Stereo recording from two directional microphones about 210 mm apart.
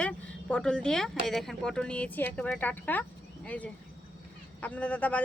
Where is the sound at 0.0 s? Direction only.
5° left (ahead or behind).